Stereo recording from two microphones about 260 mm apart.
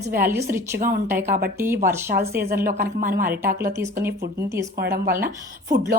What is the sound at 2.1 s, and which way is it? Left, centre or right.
Speech, right.